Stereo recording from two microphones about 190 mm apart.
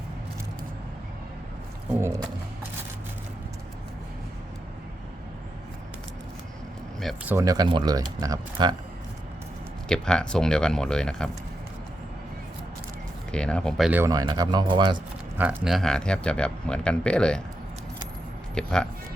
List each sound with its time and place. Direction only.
1.9 s speech: 15° right (ahead or behind)
7.3 s speech: 15° right (ahead or behind)
9.9 s speech: 5° left (ahead or behind)
13.3 s speech: 5° left (ahead or behind)
14.0 s speech: 20° right (ahead or behind)
15.4 s speech: 5° right (ahead or behind)
18.5 s speech: 5° left (ahead or behind)